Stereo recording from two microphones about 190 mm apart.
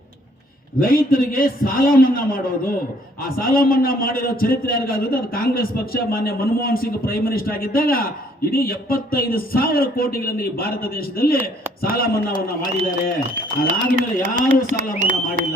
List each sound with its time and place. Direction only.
0.8 s a man's voice: 50° left (ahead or behind)
11.9 s a man's voice: 50° left (ahead or behind)
13.3 s speech: 45° right (ahead or behind)